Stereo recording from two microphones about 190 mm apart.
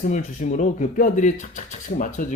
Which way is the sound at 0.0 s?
40° left (ahead or behind).